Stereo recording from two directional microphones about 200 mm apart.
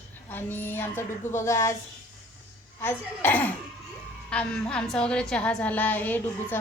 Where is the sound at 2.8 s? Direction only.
10° left (ahead or behind).